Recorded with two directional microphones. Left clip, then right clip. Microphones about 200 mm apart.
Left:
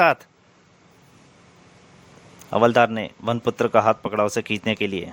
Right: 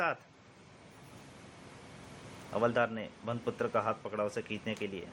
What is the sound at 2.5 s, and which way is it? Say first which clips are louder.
A man's voice: left 14 dB; 60° left (ahead or behind).